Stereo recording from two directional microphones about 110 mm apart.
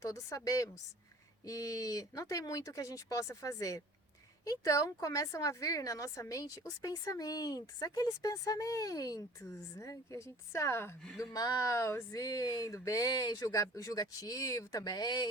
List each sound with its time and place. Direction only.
0.0 s a woman's voice: 30° left (ahead or behind)
11.2 s a woman's voice: 35° left (ahead or behind)
12.2 s a woman's voice: 35° left (ahead or behind)